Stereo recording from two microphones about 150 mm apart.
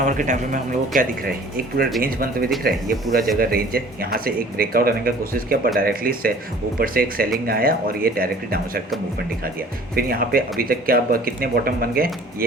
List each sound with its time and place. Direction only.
0.0 s speech: 60° right (ahead or behind); by 8.8 s 80° right
9.9 s speech: 80° right